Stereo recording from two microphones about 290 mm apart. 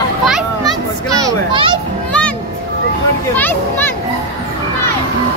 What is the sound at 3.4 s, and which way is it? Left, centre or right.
Speech, centre.